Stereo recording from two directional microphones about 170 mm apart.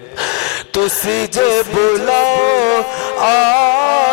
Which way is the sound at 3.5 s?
25° right (ahead or behind).